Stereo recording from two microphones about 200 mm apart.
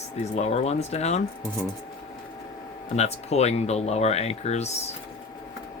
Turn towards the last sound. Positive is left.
turn(degrees=35)  # may be behind; listen again after turning